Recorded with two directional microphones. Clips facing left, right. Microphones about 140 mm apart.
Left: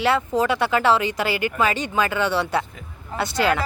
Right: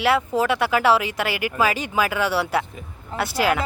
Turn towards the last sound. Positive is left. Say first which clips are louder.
# even
turn(degrees=-5)  # may be behind; listen again after turning